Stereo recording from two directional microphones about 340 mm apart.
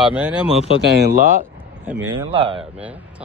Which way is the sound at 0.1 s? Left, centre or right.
Centre.